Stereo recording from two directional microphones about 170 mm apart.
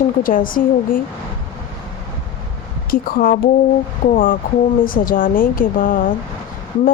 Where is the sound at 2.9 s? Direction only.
60° left (ahead or behind).